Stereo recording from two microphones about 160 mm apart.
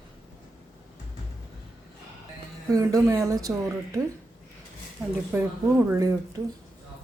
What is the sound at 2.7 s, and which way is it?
Speech, 20° right (ahead or behind).